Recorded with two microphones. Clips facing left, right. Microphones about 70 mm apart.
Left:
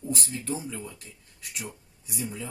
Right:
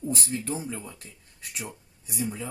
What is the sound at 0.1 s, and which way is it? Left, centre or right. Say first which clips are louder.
Speech: even; right.